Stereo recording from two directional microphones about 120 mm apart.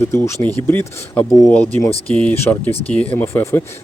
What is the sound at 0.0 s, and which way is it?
Speech, 20° left (ahead or behind).